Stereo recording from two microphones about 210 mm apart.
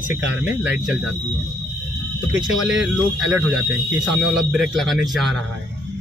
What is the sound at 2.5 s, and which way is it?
Speech, centre (ahead or behind).